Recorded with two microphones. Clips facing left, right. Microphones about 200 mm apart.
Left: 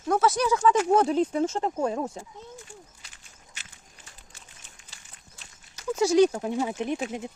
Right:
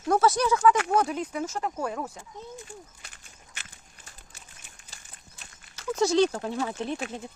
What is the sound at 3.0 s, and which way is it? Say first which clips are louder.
Walk: right 2 dB; 55° right (ahead or behind).